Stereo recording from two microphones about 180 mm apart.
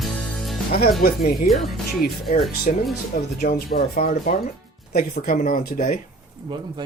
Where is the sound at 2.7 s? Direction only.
45° left (ahead or behind).